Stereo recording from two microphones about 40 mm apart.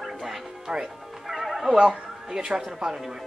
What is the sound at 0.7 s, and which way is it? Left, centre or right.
Speech, centre.